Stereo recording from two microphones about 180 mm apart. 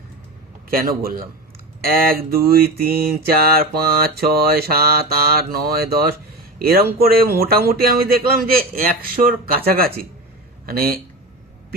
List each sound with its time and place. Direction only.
0.7 s mantra: 55° right (ahead or behind)